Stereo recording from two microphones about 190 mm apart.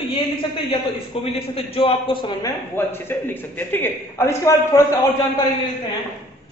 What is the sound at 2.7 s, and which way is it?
A man's voice, 10° left (ahead or behind).